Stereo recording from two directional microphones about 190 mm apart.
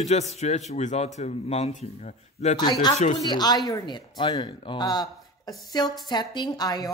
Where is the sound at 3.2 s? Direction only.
20° left (ahead or behind).